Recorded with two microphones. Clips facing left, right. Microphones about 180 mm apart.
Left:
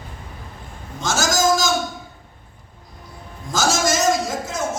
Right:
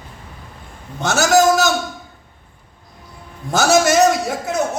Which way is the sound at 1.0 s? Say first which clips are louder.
Right 7 dB; 60° right (ahead or behind).